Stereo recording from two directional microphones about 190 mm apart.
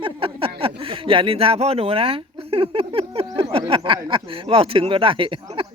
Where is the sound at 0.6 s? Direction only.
30° right (ahead or behind).